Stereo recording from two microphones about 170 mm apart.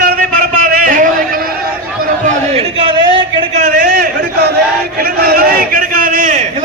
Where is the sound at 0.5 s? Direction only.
55° right (ahead or behind).